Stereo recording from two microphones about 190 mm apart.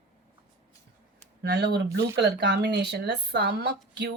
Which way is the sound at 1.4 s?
60° right (ahead or behind).